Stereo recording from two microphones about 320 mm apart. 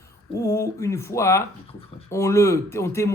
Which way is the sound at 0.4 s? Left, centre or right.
Centre.